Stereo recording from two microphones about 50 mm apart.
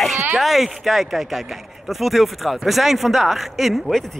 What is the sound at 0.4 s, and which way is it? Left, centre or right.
Speech, centre.